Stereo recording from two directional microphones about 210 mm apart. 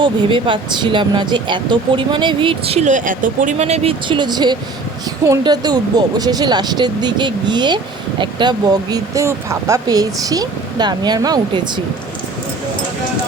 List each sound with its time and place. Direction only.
0.0 s speech: 25° right (ahead or behind)